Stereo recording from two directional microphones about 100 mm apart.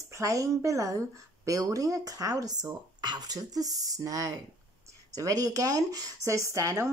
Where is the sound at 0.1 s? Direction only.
35° right (ahead or behind).